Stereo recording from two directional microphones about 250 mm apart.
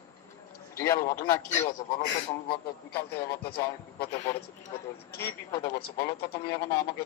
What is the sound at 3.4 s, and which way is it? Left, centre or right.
Speech, left.